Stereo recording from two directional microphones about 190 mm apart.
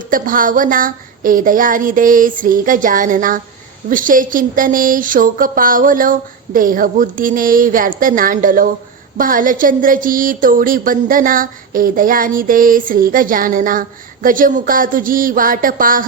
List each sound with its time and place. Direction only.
0.1 s speech: 45° right (ahead or behind)